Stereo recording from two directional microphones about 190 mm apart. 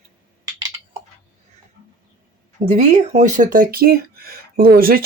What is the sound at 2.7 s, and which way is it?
Speech, 40° right (ahead or behind).